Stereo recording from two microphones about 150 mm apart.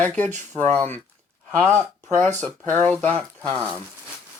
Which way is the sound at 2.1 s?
5° left (ahead or behind).